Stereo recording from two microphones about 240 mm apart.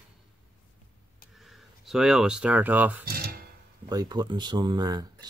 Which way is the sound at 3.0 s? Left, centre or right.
Right.